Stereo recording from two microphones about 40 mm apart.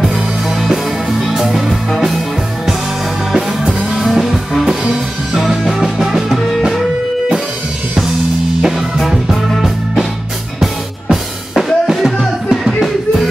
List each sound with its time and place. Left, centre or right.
1.2 s music: centre
3.9 s music: centre
8.9 s music: centre
11.5 s music: centre